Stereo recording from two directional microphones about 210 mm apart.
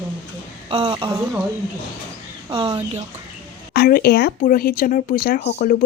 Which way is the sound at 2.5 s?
25° right (ahead or behind).